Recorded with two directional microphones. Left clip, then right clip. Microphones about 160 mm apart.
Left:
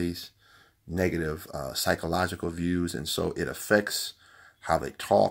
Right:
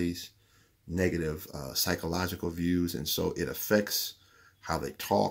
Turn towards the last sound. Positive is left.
turn(degrees=15)  # may be behind; listen again after turning